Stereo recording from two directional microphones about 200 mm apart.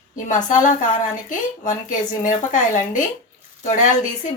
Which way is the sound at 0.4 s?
40° left (ahead or behind).